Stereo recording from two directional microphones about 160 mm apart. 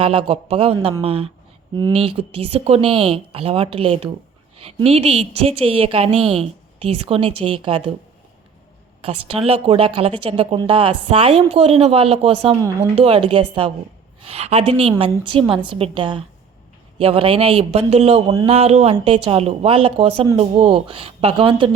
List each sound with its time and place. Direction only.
0.0 s a woman's voice: 35° right (ahead or behind)
9.0 s a woman's voice: 35° right (ahead or behind)